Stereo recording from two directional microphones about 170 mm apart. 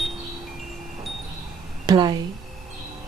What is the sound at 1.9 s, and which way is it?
Chime, 25° right (ahead or behind).